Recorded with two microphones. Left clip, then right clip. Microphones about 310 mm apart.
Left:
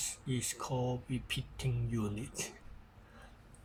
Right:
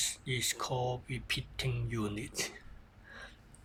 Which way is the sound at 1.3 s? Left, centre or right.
Right.